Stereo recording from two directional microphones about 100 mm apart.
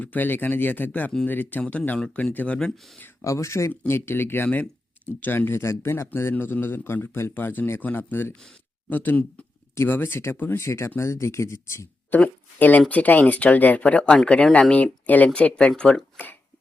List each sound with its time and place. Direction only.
0.0 s a man's voice: 15° left (ahead or behind)
3.0 s a man's voice: 30° left (ahead or behind)
12.1 s speech: 15° left (ahead or behind)